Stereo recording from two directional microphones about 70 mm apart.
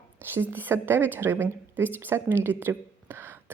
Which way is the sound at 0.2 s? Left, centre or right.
Right.